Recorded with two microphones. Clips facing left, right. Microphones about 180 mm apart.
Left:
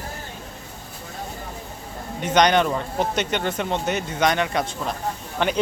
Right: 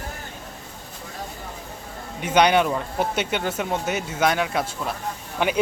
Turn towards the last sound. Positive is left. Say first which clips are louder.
# left 1 dB
turn(degrees=-10)  # may be behind; listen again after turning